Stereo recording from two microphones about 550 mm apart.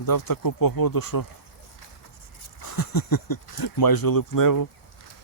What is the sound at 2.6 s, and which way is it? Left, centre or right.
Speech, left.